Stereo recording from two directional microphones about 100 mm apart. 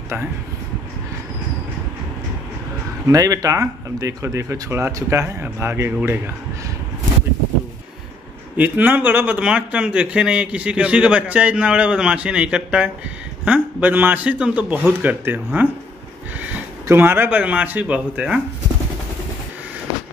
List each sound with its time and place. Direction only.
3.1 s speech: 35° right (ahead or behind)
8.5 s a man's voice: 15° right (ahead or behind)
16.8 s a man's voice: 20° right (ahead or behind)